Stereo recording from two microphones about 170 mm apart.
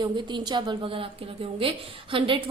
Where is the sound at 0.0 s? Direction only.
25° right (ahead or behind).